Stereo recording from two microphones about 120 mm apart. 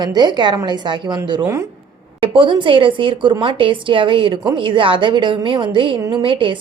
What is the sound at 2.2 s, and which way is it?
A woman's voice, 45° right (ahead or behind).